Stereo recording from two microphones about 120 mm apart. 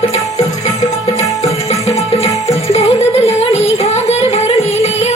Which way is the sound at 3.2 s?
65° left (ahead or behind).